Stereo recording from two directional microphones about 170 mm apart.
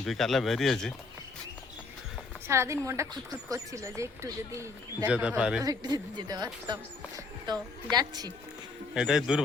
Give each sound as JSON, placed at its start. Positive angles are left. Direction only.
{"t": 0.0, "sound": "speech", "side_deg": 0}
{"t": 2.5, "sound": "speech", "side_deg": -15}
{"t": 5.1, "sound": "speech", "side_deg": -5}
{"t": 5.6, "sound": "speech", "side_deg": -25}
{"t": 9.0, "sound": "speech", "side_deg": -5}